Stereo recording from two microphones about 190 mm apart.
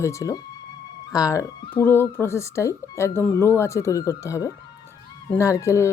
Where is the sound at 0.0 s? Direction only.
15° left (ahead or behind).